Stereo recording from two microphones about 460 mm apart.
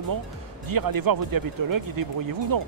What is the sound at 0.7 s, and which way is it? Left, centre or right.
Speech, right.